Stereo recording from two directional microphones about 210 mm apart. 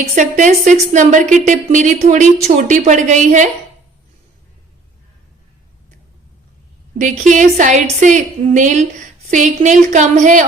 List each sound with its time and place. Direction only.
0.2 s a woman's voice: 35° right (ahead or behind)
7.0 s a woman's voice: 35° right (ahead or behind)